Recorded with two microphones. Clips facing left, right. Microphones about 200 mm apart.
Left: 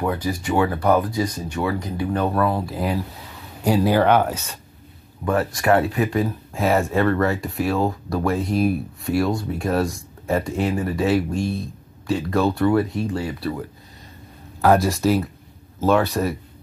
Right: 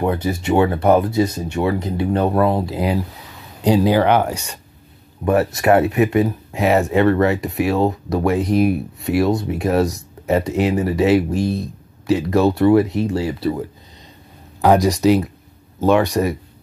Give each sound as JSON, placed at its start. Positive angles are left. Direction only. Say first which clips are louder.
{"t": 0.0, "sound": "speech", "louder": "right 4 dB", "side_deg": -25}